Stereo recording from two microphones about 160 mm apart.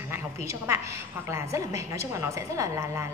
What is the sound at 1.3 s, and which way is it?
A woman's voice, 20° right (ahead or behind).